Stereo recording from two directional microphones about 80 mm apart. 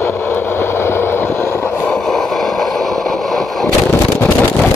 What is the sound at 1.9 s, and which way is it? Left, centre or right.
Vehicle, centre.